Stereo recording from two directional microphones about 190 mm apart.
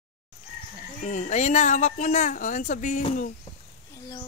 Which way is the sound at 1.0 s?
40° left (ahead or behind).